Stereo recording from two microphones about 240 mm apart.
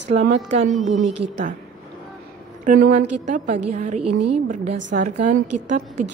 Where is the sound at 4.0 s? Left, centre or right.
Right.